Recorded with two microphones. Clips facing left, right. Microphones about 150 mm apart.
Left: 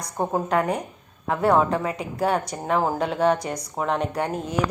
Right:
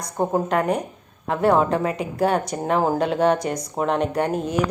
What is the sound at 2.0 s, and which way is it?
A woman's voice, 20° right (ahead or behind).